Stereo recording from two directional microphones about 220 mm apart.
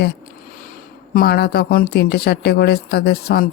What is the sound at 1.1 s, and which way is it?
Speech, 45° left (ahead or behind).